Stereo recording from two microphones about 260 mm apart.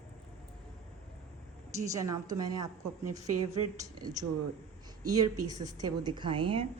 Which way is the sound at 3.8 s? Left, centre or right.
Centre.